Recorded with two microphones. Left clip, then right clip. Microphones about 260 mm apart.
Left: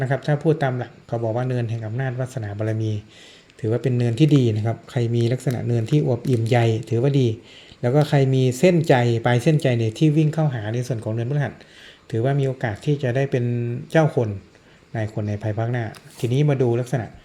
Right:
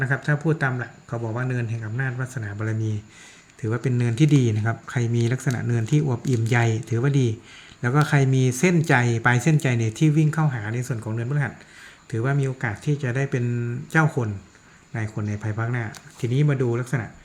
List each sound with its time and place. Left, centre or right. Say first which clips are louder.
0.0 s speech: left 3 dB; centre